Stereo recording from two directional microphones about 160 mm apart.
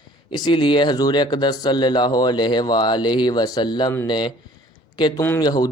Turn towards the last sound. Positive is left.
turn(degrees=25)  # may be behind; listen again after turning